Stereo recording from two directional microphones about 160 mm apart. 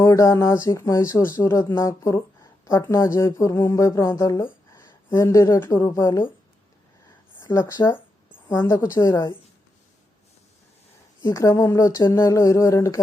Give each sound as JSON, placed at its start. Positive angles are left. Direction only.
{"t": 0.0, "sound": "speech", "side_deg": 20}
{"t": 7.4, "sound": "speech", "side_deg": 20}
{"t": 11.2, "sound": "speech", "side_deg": 20}